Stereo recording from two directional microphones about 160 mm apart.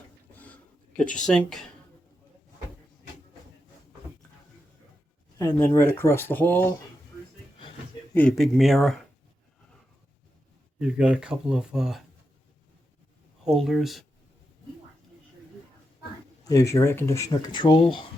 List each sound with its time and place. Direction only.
0.3 s a sound: 10° left (ahead or behind)
1.0 s speech: 50° left (ahead or behind)
1.3 s speech: 5° left (ahead or behind)
5.4 s speech: 15° left (ahead or behind)
8.4 s speech: centre (ahead or behind)
10.8 s speech: 5° right (ahead or behind)
13.4 s speech: centre (ahead or behind)
16.4 s speech: 20° left (ahead or behind)